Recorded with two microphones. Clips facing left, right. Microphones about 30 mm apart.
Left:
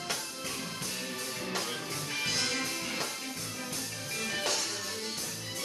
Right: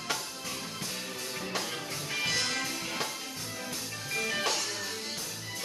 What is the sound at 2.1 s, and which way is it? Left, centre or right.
Music, centre.